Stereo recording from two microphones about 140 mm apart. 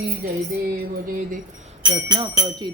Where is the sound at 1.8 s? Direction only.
30° right (ahead or behind).